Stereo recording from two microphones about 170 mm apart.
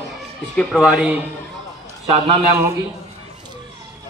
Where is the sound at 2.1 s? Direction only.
40° right (ahead or behind).